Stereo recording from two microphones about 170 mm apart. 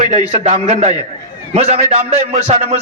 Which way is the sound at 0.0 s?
45° right (ahead or behind).